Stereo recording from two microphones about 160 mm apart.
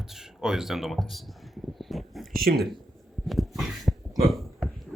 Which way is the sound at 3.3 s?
Centre (ahead or behind).